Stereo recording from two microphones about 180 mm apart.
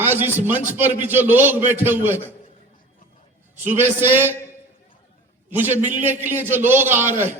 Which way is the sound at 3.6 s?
10° right (ahead or behind).